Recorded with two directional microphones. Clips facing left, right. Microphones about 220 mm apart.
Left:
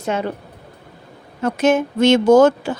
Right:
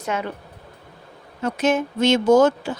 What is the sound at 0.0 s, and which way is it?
Speech, 30° left (ahead or behind).